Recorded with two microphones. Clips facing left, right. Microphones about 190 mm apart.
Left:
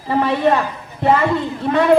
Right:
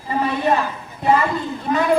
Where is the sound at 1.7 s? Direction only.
60° left (ahead or behind).